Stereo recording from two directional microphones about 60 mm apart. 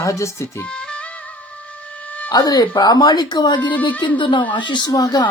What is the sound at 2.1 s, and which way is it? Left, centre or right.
Dog, left.